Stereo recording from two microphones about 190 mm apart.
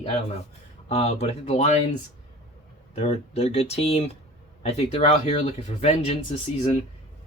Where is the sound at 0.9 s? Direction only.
35° left (ahead or behind).